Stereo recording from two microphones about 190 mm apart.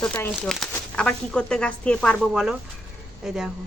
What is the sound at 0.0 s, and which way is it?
Speech, 5° left (ahead or behind).